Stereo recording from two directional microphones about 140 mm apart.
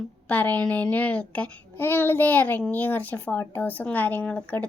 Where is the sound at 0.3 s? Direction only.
10° left (ahead or behind).